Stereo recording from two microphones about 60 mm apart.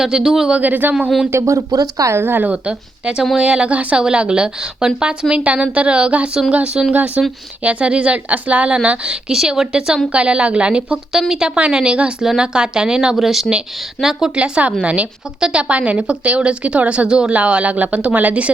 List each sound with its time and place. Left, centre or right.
0.0 s a woman's voice: centre
0.5 s speech: right
1.3 s speech: right
2.1 s a woman's voice: right
2.6 s a woman's voice: centre